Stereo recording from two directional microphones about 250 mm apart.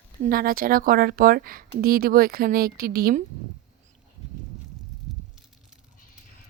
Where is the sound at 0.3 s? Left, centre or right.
Right.